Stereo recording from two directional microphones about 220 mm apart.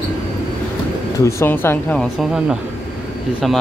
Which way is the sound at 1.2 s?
10° left (ahead or behind).